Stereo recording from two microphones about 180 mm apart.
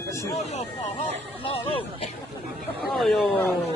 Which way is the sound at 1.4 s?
30° left (ahead or behind).